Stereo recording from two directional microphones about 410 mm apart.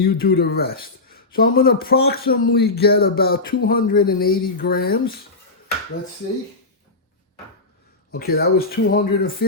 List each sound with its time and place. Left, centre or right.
0.0 s speech: left
8.1 s speech: left